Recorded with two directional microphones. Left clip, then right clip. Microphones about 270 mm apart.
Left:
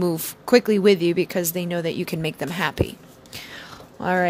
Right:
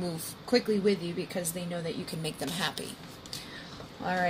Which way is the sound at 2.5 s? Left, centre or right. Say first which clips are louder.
Left 8 dB; left.